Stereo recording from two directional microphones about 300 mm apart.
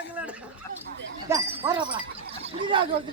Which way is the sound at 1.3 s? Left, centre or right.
Centre.